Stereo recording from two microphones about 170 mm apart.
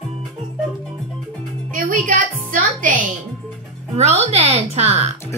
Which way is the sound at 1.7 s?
50° right (ahead or behind).